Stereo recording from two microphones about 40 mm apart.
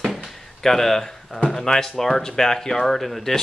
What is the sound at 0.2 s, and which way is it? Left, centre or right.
Speech, centre.